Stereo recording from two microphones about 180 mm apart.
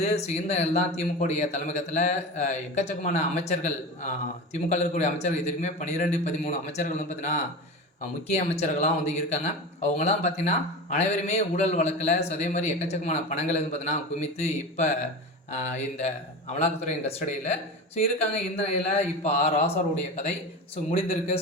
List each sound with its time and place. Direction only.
0.0 s speech: 40° left (ahead or behind)